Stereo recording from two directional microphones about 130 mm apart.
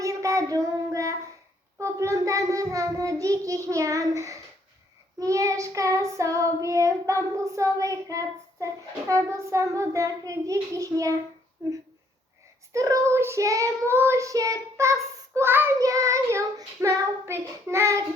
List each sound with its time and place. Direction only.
0.0 s child singing: 25° right (ahead or behind)
12.7 s child singing: 25° right (ahead or behind)